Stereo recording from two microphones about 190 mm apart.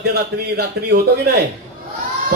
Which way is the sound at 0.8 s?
60° right (ahead or behind).